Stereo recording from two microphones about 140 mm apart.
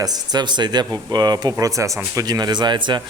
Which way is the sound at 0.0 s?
30° right (ahead or behind).